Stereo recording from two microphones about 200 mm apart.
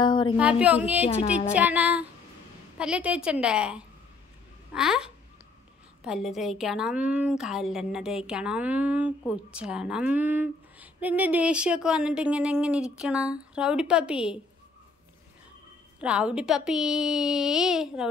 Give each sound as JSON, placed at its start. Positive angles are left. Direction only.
{"t": 0.0, "sound": "a sound", "side_deg": 25}
{"t": 0.4, "sound": "speech", "side_deg": -5}
{"t": 1.0, "sound": "speech", "side_deg": 30}
{"t": 1.5, "sound": "a woman's voice", "side_deg": -10}
{"t": 16.0, "sound": "a woman's voice", "side_deg": -5}